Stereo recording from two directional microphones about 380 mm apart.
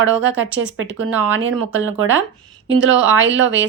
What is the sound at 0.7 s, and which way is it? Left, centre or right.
Speech, right.